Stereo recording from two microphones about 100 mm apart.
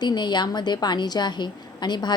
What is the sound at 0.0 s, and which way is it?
A woman's voice, 45° left (ahead or behind).